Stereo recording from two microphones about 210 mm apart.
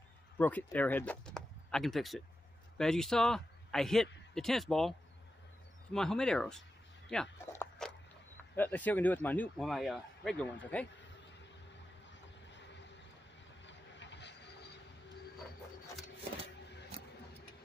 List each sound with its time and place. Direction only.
0.4 s speech: 5° left (ahead or behind)
5.9 s speech: 5° left (ahead or behind)
7.3 s a sound: 10° left (ahead or behind)
8.5 s speech: 10° left (ahead or behind)
12.1 s a sound: 60° left (ahead or behind)
13.7 s vehicle: 60° left (ahead or behind)